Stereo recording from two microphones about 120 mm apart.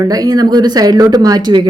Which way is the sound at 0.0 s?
30° right (ahead or behind).